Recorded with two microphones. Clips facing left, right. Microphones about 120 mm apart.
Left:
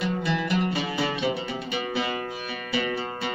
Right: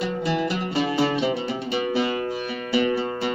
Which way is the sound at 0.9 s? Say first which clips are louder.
Right 6 dB; 30° right (ahead or behind).